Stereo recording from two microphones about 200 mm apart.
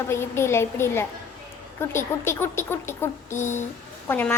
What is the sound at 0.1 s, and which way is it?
Speech, 15° left (ahead or behind).